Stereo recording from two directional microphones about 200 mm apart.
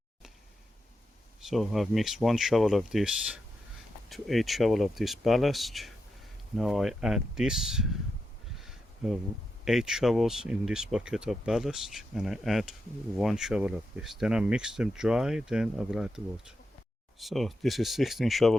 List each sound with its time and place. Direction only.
1.4 s speech: centre (ahead or behind)
8.5 s a sound: centre (ahead or behind)
9.6 s speech: centre (ahead or behind)